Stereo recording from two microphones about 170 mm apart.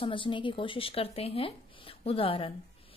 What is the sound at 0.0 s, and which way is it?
A woman's voice, 30° left (ahead or behind).